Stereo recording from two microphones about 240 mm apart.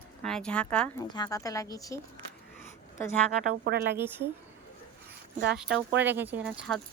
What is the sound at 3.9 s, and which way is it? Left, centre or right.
Speech, centre.